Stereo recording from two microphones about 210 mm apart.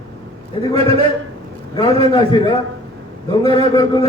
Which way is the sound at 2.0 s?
20° left (ahead or behind).